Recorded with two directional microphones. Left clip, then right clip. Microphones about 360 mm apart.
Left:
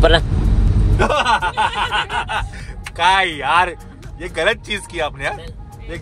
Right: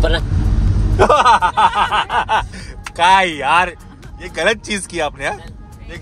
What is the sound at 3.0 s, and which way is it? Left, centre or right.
Speech, centre.